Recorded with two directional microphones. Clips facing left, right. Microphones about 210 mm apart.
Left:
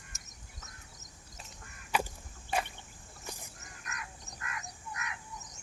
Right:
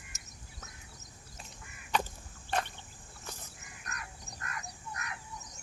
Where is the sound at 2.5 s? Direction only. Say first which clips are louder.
Even; 5° left (ahead or behind).